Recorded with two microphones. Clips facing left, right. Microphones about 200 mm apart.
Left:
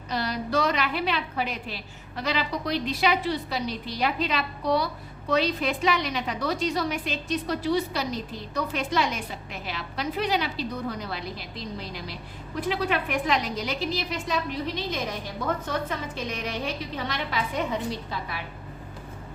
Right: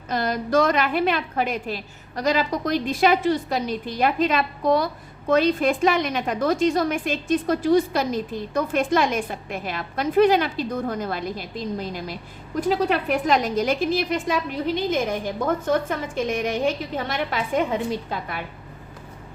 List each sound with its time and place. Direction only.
0.1 s a woman's voice: 50° right (ahead or behind)